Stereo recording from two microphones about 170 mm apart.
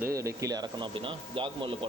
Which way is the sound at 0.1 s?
20° right (ahead or behind).